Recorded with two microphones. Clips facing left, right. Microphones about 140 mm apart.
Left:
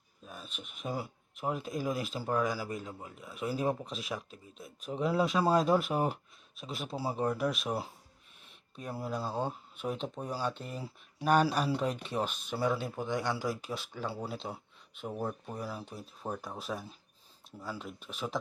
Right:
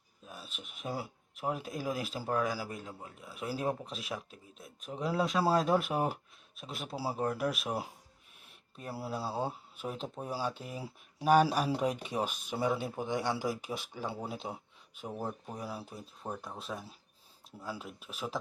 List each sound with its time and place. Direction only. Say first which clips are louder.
0.3 s speech: left 1 dB; centre (ahead or behind)
16.3 s speech: left 2 dB; 5° left (ahead or behind)
17.6 s speech: left 1 dB; 10° right (ahead or behind)